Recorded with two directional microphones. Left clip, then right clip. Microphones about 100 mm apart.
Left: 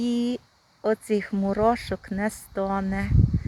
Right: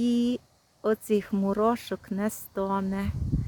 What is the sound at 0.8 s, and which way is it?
Speech, 25° right (ahead or behind).